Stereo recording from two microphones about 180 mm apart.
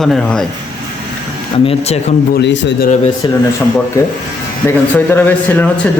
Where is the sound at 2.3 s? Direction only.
75° left (ahead or behind).